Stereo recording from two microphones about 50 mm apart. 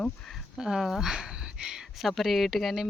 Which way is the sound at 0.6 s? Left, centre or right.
Centre.